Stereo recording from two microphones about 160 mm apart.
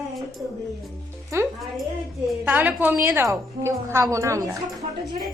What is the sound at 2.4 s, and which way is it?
A woman's voice, 10° right (ahead or behind).